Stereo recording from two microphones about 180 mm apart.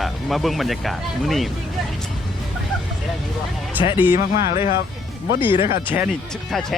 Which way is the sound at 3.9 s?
10° right (ahead or behind).